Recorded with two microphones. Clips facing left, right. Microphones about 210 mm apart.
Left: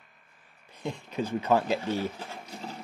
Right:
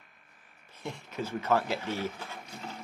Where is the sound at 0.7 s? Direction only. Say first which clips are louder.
Left 4 dB; 15° left (ahead or behind).